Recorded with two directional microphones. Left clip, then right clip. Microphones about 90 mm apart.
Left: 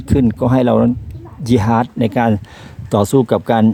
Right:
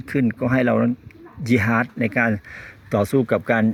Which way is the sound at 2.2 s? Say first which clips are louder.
Left 3 dB; 50° left (ahead or behind).